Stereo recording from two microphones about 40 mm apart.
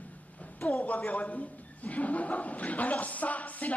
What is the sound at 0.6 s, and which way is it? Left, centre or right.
Speech, left.